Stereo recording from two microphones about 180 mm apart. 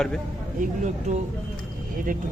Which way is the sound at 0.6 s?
40° right (ahead or behind).